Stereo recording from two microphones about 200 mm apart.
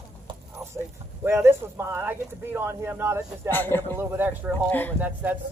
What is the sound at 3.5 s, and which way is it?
Speech, 10° left (ahead or behind).